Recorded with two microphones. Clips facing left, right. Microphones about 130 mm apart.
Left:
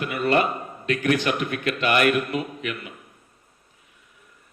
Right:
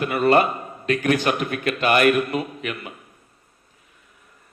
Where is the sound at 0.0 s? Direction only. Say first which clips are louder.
Right 4 dB; 40° right (ahead or behind).